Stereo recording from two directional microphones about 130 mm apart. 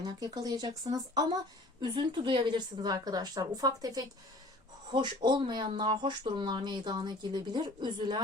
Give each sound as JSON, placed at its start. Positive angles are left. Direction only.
{"t": 0.0, "sound": "speech", "side_deg": -30}